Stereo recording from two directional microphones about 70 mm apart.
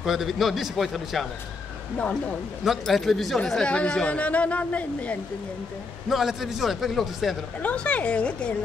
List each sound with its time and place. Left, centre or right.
0.0 s a man's voice: centre
2.0 s a woman's voice: centre
2.6 s a man's voice: centre
3.6 s speech: centre
6.0 s a man's voice: centre
7.6 s a woman's voice: centre